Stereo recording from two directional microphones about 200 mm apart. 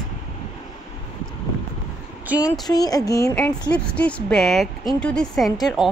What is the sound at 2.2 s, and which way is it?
Speech, 5° right (ahead or behind).